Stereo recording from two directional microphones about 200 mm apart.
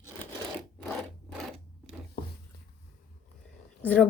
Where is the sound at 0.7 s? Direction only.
5° left (ahead or behind).